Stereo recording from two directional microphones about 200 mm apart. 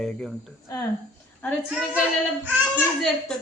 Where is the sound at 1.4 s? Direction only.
5° left (ahead or behind).